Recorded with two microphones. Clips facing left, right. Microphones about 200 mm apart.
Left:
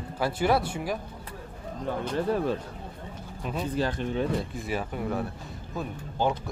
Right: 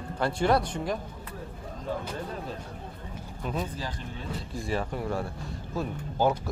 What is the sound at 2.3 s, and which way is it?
Speech, 75° left (ahead or behind).